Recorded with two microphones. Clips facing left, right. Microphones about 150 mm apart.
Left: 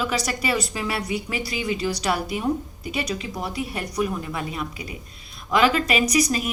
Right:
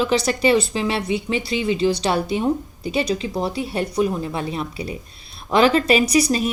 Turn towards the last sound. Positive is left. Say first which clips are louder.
# right 4 dB
turn(degrees=-30)  # may be behind; listen again after turning